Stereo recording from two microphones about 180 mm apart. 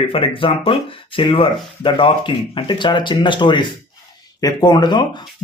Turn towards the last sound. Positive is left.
turn(degrees=25)  # may be behind; listen again after turning